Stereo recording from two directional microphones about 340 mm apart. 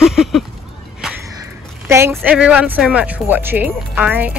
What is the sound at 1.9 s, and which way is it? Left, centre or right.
Speech, centre.